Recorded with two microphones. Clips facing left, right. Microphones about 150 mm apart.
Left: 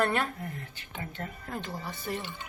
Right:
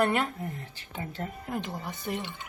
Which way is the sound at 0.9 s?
30° right (ahead or behind).